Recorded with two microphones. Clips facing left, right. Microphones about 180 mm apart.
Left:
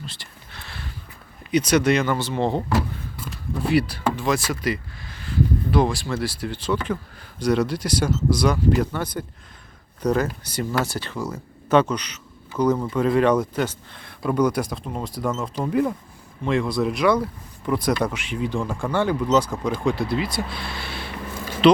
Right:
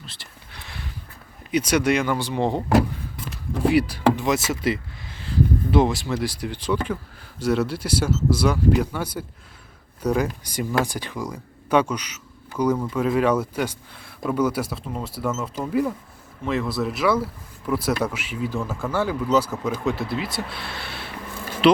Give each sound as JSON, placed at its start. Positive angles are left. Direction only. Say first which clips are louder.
{"t": 0.0, "sound": "speech", "louder": "left 5 dB", "side_deg": 0}
{"t": 0.5, "sound": "a sound", "louder": "even", "side_deg": -15}
{"t": 1.5, "sound": "speech", "louder": "left 2 dB", "side_deg": -10}
{"t": 3.7, "sound": "speech", "louder": "right 3 dB", "side_deg": -10}